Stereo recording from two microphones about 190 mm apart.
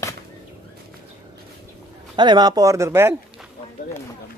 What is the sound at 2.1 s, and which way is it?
Speech, 20° right (ahead or behind).